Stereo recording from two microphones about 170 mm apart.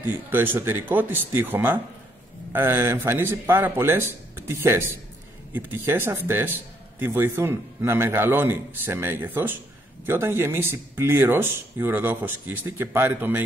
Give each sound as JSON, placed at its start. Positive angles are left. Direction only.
{"t": 0.0, "sound": "a man's voice", "side_deg": -10}